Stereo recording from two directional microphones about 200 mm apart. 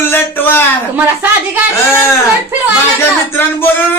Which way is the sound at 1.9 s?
10° left (ahead or behind).